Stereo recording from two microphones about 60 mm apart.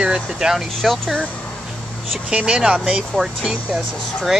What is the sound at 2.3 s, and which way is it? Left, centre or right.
Speech, centre.